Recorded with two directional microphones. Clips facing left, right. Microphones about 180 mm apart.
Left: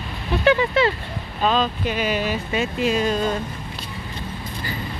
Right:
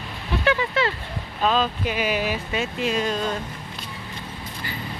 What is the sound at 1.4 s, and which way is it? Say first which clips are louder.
Speech: left 1 dB; 5° right (ahead or behind).